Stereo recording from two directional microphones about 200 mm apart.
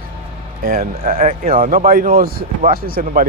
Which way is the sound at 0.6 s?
45° right (ahead or behind).